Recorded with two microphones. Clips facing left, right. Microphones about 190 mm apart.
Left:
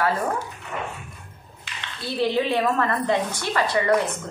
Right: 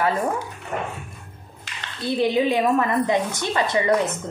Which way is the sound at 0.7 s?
45° right (ahead or behind).